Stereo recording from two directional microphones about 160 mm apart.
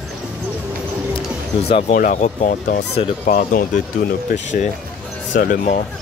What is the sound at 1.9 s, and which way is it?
Speech, 55° left (ahead or behind).